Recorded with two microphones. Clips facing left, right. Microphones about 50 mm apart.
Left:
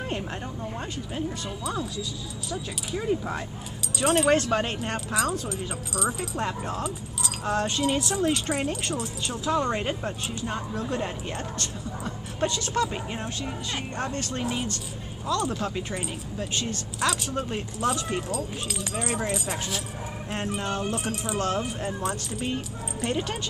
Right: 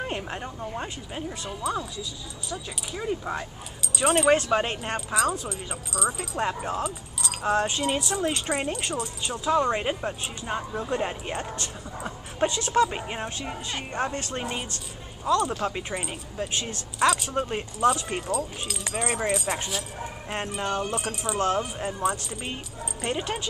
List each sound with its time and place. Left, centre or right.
0.0 s speech: centre
6.4 s speech: centre
6.8 s speech: centre
7.4 s speech: centre
7.8 s speech: centre
14.4 s speech: centre
18.3 s speech: centre
20.9 s speech: centre
21.4 s speech: centre